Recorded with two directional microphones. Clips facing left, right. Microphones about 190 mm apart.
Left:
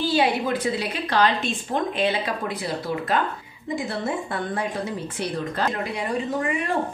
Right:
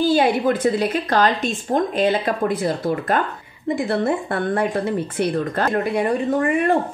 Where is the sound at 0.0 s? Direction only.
45° right (ahead or behind).